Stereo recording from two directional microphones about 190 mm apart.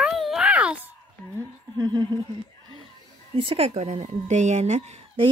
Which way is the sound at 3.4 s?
30° right (ahead or behind).